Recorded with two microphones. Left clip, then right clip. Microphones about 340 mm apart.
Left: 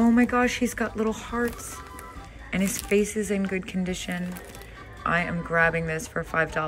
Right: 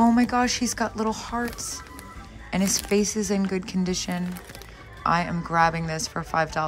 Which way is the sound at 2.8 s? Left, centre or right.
Centre.